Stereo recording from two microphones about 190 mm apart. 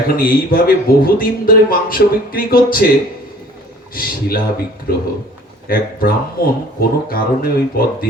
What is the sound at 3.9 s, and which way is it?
Speech, 50° left (ahead or behind).